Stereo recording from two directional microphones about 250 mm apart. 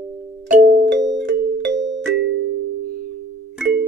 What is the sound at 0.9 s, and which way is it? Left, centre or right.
Music, right.